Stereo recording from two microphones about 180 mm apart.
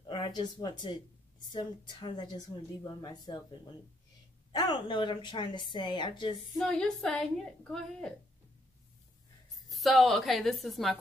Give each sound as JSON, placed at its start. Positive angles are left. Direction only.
{"t": 0.0, "sound": "a woman's voice", "side_deg": 25}
{"t": 4.5, "sound": "a woman's voice", "side_deg": 25}
{"t": 6.6, "sound": "a woman's voice", "side_deg": 5}
{"t": 9.7, "sound": "a woman's voice", "side_deg": 0}